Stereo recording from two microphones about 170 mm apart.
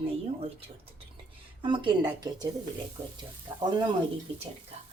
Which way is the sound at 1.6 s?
25° right (ahead or behind).